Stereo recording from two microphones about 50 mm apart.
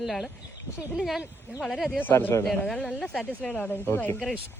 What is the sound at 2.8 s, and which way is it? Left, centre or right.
Speech, left.